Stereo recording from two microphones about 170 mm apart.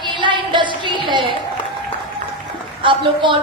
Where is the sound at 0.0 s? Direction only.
30° right (ahead or behind).